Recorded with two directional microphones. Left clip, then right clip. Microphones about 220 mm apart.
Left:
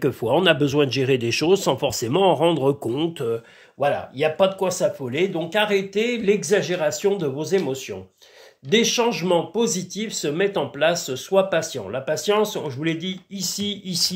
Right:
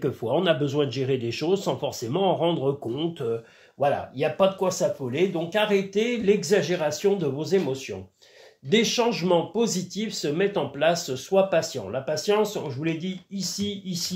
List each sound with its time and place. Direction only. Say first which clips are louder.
0.0 s speech: left 5 dB; 35° left (ahead or behind)